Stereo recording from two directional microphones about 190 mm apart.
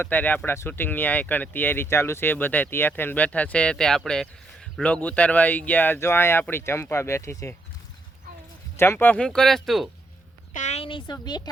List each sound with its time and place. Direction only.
0.0 s speech: 10° left (ahead or behind)
8.7 s speech: 15° left (ahead or behind)
10.5 s a sound: 40° left (ahead or behind)
11.0 s speech: 20° left (ahead or behind)